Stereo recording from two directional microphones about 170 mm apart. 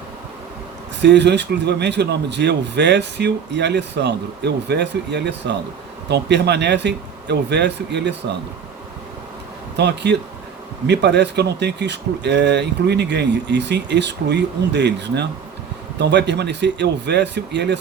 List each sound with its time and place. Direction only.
1.0 s speech: 90° right
9.7 s speech: 90° right